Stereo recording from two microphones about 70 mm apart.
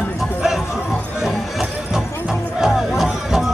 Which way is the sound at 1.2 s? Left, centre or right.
Centre.